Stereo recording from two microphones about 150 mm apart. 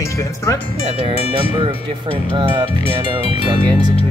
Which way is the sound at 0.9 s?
40° right (ahead or behind).